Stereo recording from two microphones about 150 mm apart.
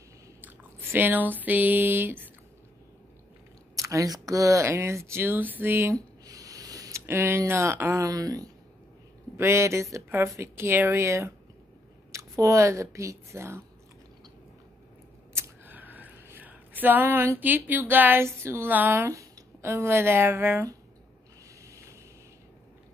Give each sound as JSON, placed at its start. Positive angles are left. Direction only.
{"t": 0.4, "sound": "a sound", "side_deg": -15}
{"t": 3.7, "sound": "speech", "side_deg": -20}
{"t": 5.9, "sound": "a sound", "side_deg": -25}
{"t": 9.4, "sound": "speech", "side_deg": -20}
{"t": 15.3, "sound": "speech", "side_deg": -15}
{"t": 21.6, "sound": "vehicle", "side_deg": -20}